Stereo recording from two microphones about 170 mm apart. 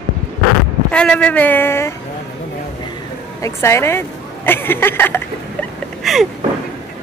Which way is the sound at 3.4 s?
15° left (ahead or behind).